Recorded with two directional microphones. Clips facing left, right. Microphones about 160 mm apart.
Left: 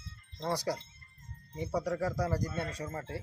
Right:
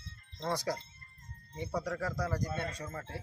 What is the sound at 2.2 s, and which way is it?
Speech, 35° left (ahead or behind).